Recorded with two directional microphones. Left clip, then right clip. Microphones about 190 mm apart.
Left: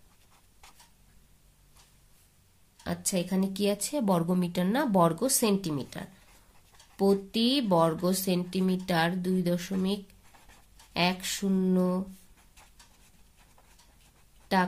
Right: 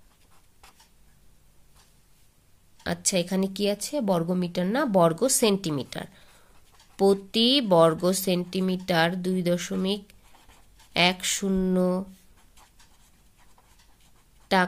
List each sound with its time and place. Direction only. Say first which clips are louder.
2.8 s a woman's voice: right 6 dB; 45° right (ahead or behind)
14.5 s speech: right 4 dB; 40° right (ahead or behind)